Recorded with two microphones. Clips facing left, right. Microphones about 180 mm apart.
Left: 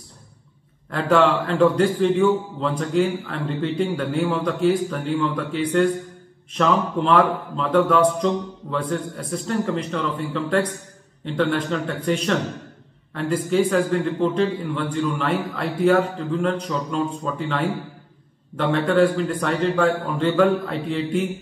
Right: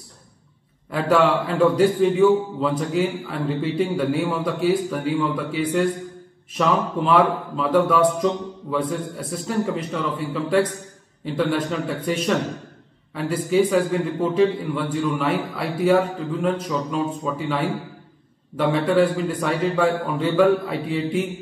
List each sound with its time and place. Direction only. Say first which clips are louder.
0.8 s a man's voice: even; 5° right (ahead or behind)